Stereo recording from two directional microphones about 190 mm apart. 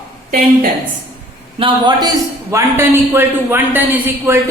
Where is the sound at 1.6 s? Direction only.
25° right (ahead or behind).